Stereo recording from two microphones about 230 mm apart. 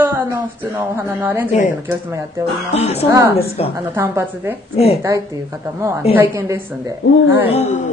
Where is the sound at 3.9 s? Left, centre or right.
Centre.